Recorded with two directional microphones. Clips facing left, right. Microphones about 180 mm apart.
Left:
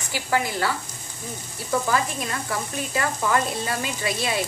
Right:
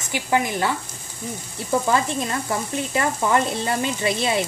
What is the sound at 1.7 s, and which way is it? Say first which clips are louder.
Speech: right 3 dB; 25° right (ahead or behind).